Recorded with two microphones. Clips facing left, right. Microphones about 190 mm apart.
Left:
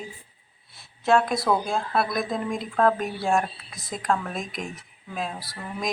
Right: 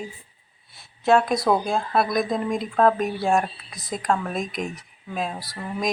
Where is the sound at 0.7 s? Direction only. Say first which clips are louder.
Right 2 dB; centre (ahead or behind).